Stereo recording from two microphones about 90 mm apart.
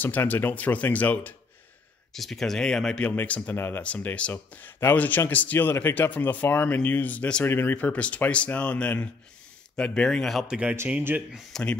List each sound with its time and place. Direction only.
0.0 s speech: 20° left (ahead or behind)
2.1 s speech: 5° left (ahead or behind); by 3.8 s 25° left (ahead or behind)
3.8 s speech: 15° left (ahead or behind)
10.5 s speech: 10° right (ahead or behind)
11.5 s speech: 5° left (ahead or behind)